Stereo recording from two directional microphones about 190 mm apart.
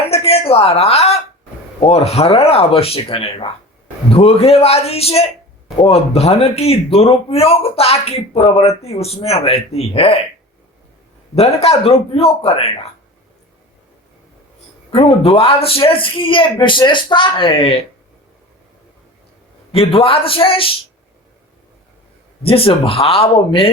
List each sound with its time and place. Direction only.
0.1 s a sound: 30° left (ahead or behind)
1.8 s a man's voice: 30° left (ahead or behind)
11.3 s a man's voice: 35° left (ahead or behind)
14.8 s speech: 30° left (ahead or behind)
19.7 s speech: 30° left (ahead or behind)
22.4 s speech: 30° left (ahead or behind)